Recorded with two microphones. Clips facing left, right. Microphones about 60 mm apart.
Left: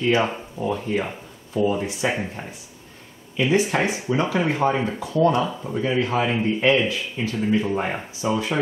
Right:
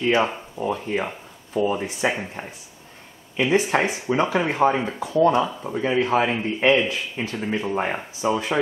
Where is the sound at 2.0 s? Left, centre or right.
Right.